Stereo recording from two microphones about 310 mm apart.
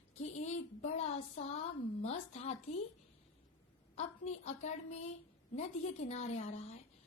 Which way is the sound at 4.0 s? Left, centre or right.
Centre.